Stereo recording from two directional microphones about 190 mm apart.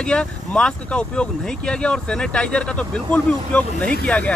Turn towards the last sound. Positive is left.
turn(degrees=5)  # may be behind; listen again after turning